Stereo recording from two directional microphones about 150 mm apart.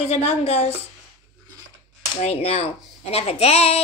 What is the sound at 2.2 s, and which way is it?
A woman's voice, 40° left (ahead or behind).